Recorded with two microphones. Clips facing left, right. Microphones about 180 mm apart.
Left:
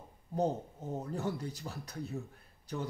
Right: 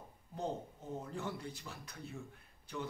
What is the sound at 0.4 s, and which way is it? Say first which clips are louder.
Speech: left 7 dB; 40° left (ahead or behind).